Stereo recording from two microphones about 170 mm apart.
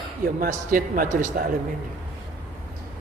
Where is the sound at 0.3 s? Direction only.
55° right (ahead or behind).